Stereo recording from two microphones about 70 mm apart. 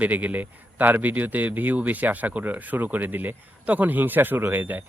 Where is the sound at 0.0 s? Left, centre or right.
Right.